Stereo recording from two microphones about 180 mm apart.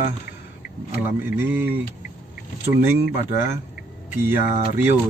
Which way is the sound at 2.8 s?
15° right (ahead or behind).